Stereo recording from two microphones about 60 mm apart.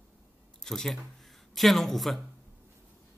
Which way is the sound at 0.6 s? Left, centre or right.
Centre.